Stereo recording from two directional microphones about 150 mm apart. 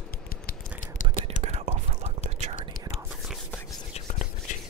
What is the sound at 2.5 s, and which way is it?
Whispering, 60° left (ahead or behind).